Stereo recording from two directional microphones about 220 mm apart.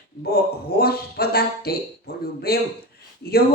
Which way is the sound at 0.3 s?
45° left (ahead or behind).